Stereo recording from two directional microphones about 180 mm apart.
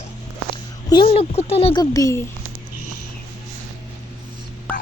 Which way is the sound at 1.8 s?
20° left (ahead or behind).